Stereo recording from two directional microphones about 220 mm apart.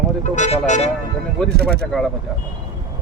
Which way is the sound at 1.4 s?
45° right (ahead or behind).